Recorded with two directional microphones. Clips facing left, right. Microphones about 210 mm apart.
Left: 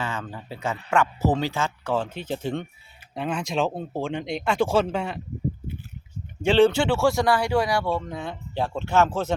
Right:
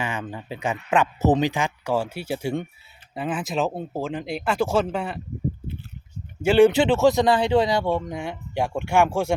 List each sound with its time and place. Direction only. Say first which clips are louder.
0.0 s speech: right 2 dB; 15° right (ahead or behind)
6.4 s speech: right 2 dB; 10° right (ahead or behind)
6.7 s speech: right 3 dB; 20° right (ahead or behind)